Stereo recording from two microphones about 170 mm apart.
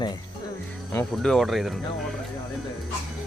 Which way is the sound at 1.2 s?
Centre (ahead or behind).